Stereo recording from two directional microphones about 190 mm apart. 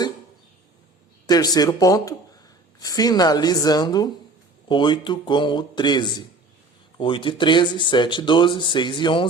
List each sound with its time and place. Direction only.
1.3 s speech: 20° left (ahead or behind)